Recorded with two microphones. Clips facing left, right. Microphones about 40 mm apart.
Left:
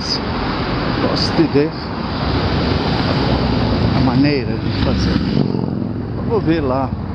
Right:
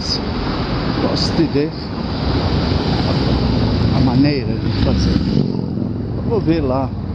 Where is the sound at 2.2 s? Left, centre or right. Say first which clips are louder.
Left 1 dB; centre.